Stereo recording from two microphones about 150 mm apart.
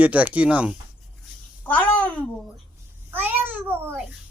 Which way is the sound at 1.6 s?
10° left (ahead or behind).